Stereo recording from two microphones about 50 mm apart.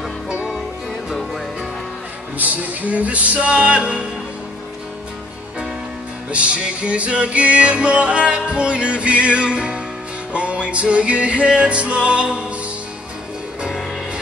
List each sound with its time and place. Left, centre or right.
0.3 s music: centre
2.3 s music: right
6.3 s music: right